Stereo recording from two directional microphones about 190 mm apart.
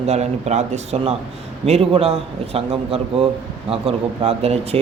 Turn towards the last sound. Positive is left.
turn(degrees=-30)  # may be behind; listen again after turning